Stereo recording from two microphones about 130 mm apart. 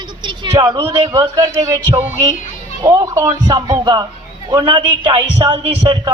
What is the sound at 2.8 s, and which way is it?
A man's voice, 25° right (ahead or behind).